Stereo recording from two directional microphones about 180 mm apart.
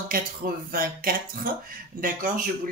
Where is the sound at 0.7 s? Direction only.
50° right (ahead or behind).